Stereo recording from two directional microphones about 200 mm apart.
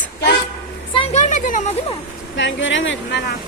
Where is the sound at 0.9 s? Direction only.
30° left (ahead or behind).